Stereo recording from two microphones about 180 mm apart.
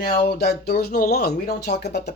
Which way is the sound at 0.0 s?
55° left (ahead or behind).